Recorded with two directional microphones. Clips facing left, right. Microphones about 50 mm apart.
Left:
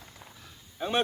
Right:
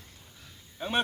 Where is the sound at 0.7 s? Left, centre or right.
Centre.